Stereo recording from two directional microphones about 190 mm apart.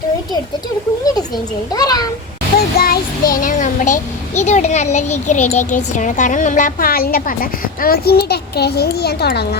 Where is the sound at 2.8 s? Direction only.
50° left (ahead or behind).